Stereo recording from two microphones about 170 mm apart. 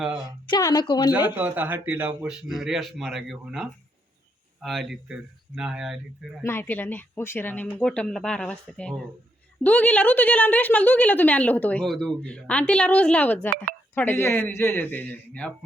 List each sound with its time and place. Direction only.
0.5 s speech: 25° left (ahead or behind)
1.1 s a man's voice: 10° right (ahead or behind)
6.4 s a woman's voice: 15° left (ahead or behind)